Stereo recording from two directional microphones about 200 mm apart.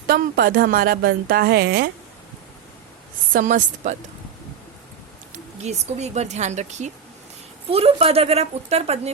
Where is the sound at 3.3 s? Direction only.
40° right (ahead or behind).